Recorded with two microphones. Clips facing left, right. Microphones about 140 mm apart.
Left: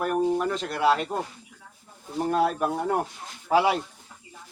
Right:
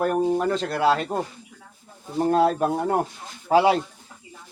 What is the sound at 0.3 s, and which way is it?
Speech, 35° right (ahead or behind).